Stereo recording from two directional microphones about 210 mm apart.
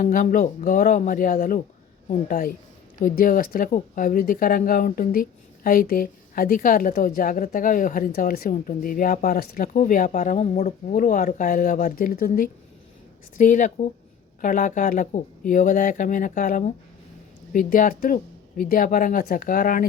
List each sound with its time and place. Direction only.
0.0 s speech: 40° left (ahead or behind)